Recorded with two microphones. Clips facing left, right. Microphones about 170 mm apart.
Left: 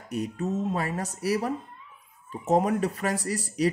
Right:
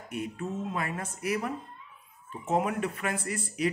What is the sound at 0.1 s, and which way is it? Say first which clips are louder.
Speech: left 5 dB; 40° left (ahead or behind).